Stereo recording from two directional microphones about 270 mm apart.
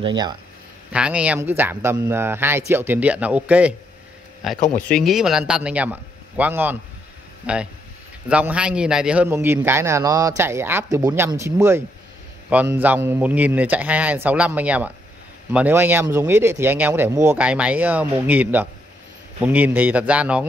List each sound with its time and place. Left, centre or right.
0.0 s speech: centre
0.9 s a man's voice: centre